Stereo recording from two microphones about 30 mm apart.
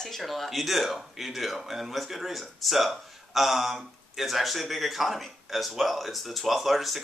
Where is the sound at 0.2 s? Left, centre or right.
Centre.